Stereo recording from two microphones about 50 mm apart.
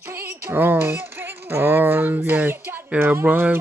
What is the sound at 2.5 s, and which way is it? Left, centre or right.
Speech, right.